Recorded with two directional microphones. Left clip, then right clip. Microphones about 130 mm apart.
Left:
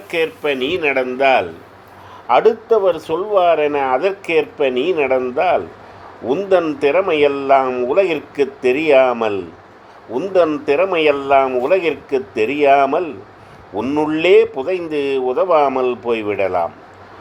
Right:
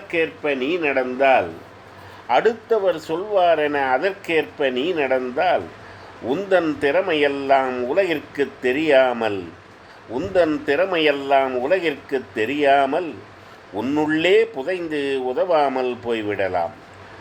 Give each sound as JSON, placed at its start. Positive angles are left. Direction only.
{"t": 0.1, "sound": "speech", "side_deg": 50}
{"t": 2.2, "sound": "a man's voice", "side_deg": 20}